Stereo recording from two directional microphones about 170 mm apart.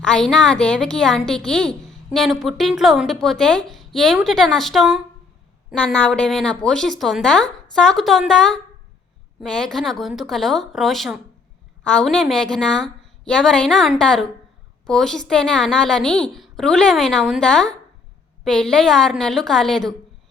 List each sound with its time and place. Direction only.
0.0 s speech: 5° left (ahead or behind)